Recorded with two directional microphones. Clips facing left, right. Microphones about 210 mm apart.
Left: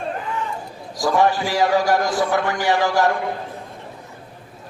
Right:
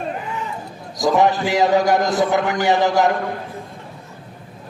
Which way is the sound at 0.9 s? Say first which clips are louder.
Right 2 dB; 20° right (ahead or behind).